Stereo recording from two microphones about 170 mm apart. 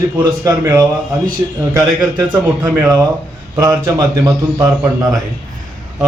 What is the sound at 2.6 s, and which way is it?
A man's voice, 20° right (ahead or behind).